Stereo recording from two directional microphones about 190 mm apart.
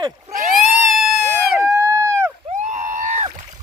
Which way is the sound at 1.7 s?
15° right (ahead or behind).